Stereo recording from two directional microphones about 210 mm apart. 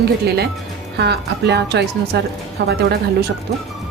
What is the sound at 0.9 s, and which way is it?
A woman's voice, 55° right (ahead or behind).